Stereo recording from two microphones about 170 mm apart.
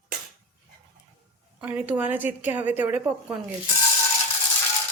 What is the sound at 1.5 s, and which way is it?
A woman's voice, 10° right (ahead or behind).